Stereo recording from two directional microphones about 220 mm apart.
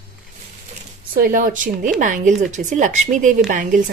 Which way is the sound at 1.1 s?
40° right (ahead or behind).